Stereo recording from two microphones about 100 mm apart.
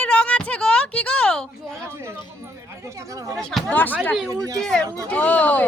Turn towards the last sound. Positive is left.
turn(degrees=15)  # may be behind; listen again after turning